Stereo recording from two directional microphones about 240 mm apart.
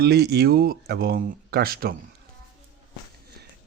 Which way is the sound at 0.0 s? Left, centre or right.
Right.